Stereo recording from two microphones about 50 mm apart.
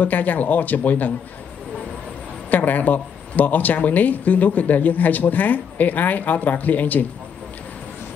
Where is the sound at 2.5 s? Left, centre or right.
Left.